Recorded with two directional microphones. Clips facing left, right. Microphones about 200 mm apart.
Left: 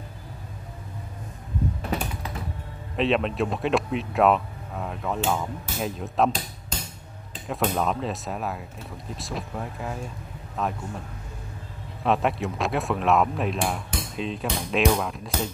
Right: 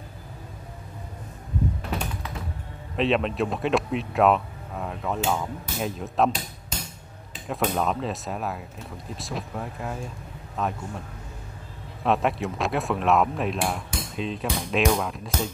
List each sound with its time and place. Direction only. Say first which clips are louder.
3.0 s speech: even; centre (ahead or behind)
7.4 s a man's voice: even; centre (ahead or behind)
12.0 s speech: even; centre (ahead or behind)